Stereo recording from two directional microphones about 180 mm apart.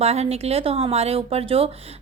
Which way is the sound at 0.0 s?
35° right (ahead or behind).